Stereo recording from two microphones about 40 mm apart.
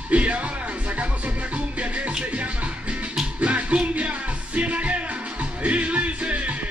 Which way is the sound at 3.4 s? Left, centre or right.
Right.